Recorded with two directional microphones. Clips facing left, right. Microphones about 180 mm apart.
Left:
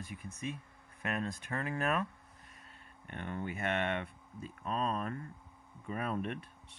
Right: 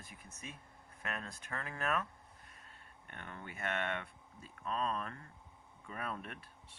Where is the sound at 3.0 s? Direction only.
20° left (ahead or behind).